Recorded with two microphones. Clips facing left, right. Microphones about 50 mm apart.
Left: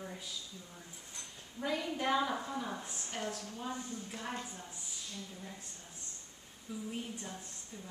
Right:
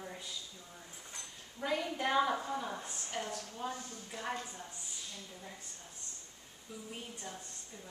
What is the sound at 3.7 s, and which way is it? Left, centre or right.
Speech, left.